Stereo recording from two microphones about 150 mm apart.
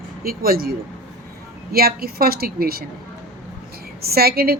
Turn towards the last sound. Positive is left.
turn(degrees=-90)